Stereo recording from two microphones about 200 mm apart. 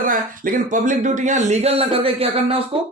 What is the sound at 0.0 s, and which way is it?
Speech, 45° right (ahead or behind).